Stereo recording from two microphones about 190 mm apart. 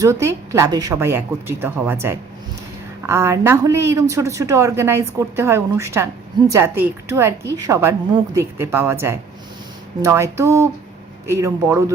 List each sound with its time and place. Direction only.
0.0 s a woman's voice: 15° right (ahead or behind)